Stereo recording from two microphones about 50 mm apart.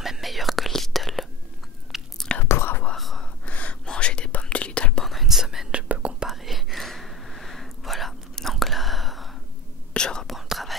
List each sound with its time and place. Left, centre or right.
0.0 s whispering: centre
2.4 s whispering: left
3.4 s gasp: left
3.8 s whispering: centre
5.0 s whispering: centre
5.7 s whispering: right
6.2 s whispering: centre
9.9 s whispering: centre
10.2 s whispering: centre